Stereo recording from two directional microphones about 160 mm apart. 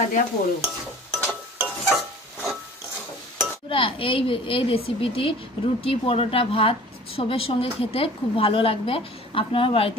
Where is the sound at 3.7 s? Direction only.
35° left (ahead or behind).